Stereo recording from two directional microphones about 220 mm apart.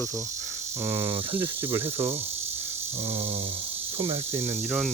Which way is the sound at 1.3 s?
25° right (ahead or behind).